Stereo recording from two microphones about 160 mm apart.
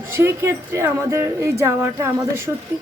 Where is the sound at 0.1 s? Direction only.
15° right (ahead or behind).